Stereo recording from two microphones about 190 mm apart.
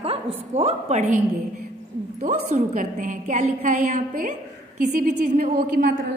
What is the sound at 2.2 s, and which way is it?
A woman's voice, 40° right (ahead or behind).